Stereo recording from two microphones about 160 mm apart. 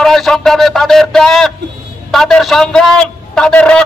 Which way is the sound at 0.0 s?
Centre (ahead or behind).